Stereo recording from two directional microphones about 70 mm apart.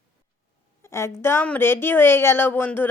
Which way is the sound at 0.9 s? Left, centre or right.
Left.